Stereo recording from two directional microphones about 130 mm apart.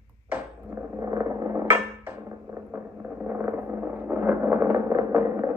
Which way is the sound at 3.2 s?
15° right (ahead or behind).